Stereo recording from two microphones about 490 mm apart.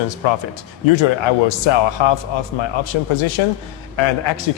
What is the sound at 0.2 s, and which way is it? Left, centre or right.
A man's voice, left.